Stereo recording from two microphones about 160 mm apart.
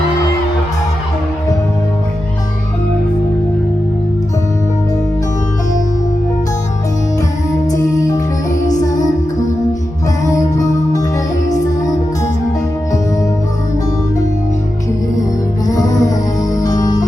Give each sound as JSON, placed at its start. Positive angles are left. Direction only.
{"t": 7.7, "sound": "music", "side_deg": 20}
{"t": 8.6, "sound": "music", "side_deg": 50}
{"t": 15.7, "sound": "music", "side_deg": 25}